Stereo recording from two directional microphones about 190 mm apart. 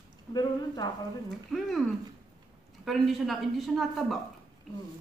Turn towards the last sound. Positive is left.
turn(degrees=0)  # may be behind; listen again after turning